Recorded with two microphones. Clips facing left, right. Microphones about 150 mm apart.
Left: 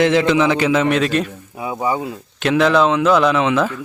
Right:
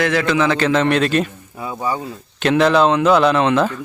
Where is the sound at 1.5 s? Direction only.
15° left (ahead or behind).